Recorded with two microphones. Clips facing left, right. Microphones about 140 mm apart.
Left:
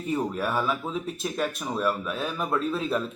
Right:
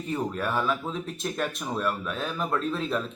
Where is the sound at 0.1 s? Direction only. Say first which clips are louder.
Left 2 dB; 5° left (ahead or behind).